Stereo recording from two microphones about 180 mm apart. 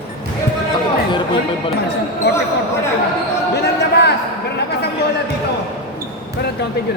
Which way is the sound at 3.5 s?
70° left (ahead or behind).